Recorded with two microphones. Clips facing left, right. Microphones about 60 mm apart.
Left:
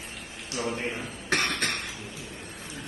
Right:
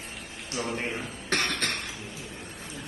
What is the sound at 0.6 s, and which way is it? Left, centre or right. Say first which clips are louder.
Cough: left 1 dB; centre.